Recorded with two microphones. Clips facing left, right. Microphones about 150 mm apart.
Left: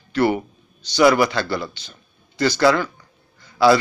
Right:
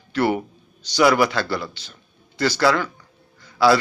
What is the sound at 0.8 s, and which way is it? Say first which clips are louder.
A man's voice: left 2 dB; 10° right (ahead or behind).